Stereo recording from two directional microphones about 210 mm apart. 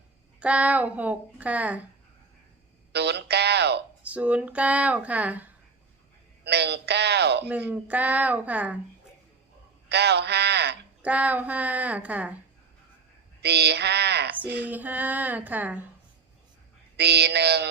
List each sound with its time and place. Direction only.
0.3 s a woman's voice: 5° right (ahead or behind)
2.9 s speech: 50° right (ahead or behind)
4.0 s a woman's voice: 5° right (ahead or behind)
6.4 s speech: 50° right (ahead or behind)
7.7 s a woman's voice: 10° right (ahead or behind)
9.9 s speech: 50° right (ahead or behind)
11.0 s a woman's voice: 5° right (ahead or behind)
13.4 s speech: 50° right (ahead or behind)
14.7 s a woman's voice: 10° right (ahead or behind)
17.0 s speech: 50° right (ahead or behind)